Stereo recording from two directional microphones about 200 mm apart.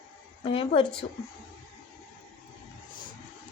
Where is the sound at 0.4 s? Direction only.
25° left (ahead or behind).